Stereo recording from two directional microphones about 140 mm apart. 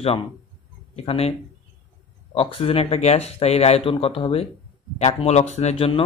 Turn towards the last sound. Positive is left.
turn(degrees=50)  # may be behind; listen again after turning